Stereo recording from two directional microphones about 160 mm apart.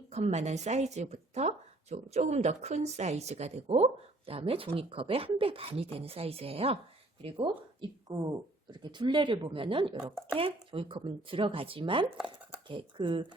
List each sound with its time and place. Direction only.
0.1 s speech: 45° right (ahead or behind)